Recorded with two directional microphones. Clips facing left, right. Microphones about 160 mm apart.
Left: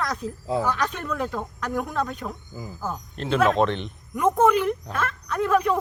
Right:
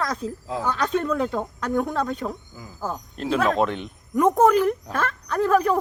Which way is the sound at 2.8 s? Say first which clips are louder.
Right 3 dB; 5° right (ahead or behind).